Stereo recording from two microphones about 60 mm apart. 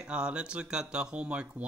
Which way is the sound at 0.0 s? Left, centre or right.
Centre.